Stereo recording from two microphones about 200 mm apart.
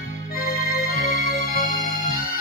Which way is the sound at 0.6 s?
50° left (ahead or behind).